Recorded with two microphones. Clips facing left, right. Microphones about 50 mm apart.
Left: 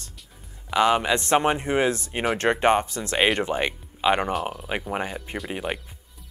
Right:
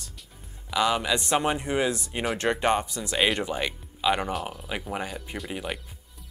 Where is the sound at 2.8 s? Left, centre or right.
Left.